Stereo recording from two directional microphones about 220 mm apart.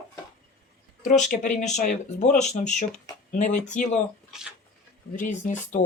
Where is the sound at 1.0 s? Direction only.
35° left (ahead or behind).